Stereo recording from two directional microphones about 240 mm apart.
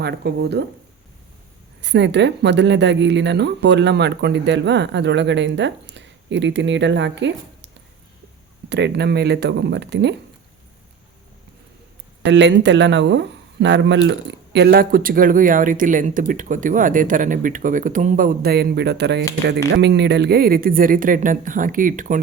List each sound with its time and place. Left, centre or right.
0.0 s speech: right
1.8 s speech: right
8.7 s speech: right
12.2 s speech: right